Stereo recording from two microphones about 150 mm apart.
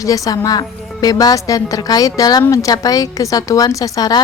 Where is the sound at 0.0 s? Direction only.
25° left (ahead or behind).